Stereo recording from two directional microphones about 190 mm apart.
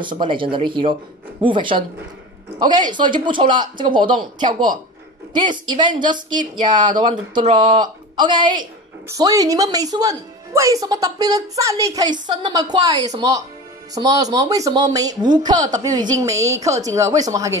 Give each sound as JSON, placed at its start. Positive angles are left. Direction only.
{"t": 0.0, "sound": "a woman's voice", "side_deg": -25}